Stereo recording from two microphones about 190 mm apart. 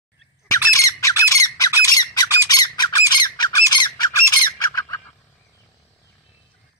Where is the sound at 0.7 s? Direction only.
15° left (ahead or behind).